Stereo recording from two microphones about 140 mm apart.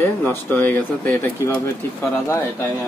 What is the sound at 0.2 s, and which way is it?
Speech, 15° left (ahead or behind).